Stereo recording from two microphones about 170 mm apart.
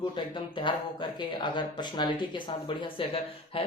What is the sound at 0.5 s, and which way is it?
Speech, 30° left (ahead or behind).